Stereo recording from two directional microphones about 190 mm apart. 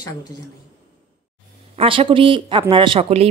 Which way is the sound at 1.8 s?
30° right (ahead or behind).